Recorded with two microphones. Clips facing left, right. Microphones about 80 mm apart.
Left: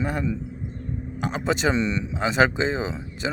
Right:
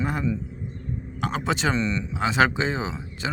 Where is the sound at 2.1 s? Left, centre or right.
Centre.